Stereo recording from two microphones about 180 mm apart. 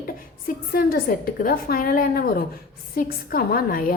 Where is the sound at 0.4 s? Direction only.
55° left (ahead or behind).